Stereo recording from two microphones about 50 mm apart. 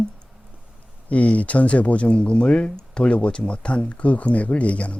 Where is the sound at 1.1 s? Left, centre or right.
Left.